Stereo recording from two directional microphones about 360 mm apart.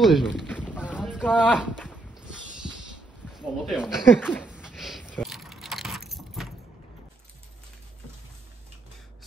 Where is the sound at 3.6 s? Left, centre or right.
Centre.